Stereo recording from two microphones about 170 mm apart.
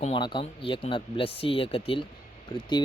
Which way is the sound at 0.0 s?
30° left (ahead or behind).